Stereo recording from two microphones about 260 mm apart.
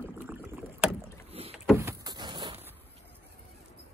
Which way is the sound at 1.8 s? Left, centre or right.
Centre.